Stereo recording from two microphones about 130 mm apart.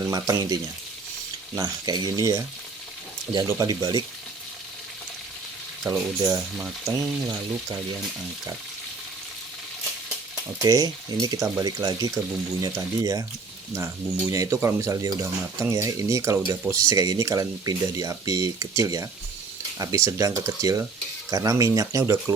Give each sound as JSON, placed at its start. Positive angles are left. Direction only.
{"t": 0.0, "sound": "speech", "side_deg": -30}
{"t": 5.9, "sound": "speech", "side_deg": -25}
{"t": 10.6, "sound": "speech", "side_deg": -30}